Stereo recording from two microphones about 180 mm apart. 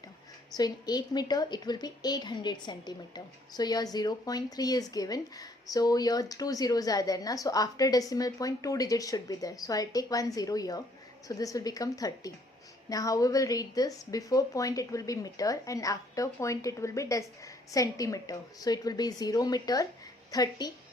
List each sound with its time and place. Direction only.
0.5 s a woman's voice: 20° left (ahead or behind)